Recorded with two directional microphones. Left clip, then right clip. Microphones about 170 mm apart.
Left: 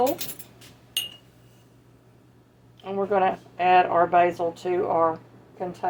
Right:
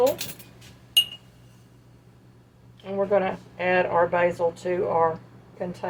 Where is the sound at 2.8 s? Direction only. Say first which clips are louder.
Even; 35° left (ahead or behind).